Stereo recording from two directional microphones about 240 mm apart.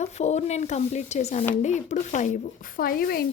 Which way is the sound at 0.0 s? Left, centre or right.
Left.